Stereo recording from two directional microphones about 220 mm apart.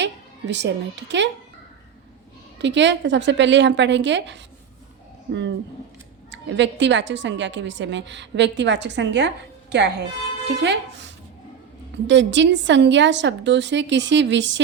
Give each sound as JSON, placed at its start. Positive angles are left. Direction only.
{"t": 0.0, "sound": "a woman's voice", "side_deg": -55}
{"t": 2.6, "sound": "a woman's voice", "side_deg": -55}